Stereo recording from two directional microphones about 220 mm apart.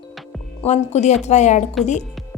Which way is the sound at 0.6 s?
30° left (ahead or behind).